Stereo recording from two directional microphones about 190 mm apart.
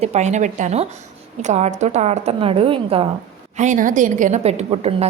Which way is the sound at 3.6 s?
40° right (ahead or behind).